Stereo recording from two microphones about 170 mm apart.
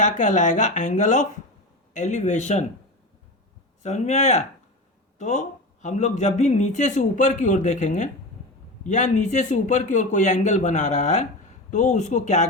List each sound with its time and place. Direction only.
0.0 s a man's voice: 45° left (ahead or behind)
3.8 s a man's voice: 40° left (ahead or behind)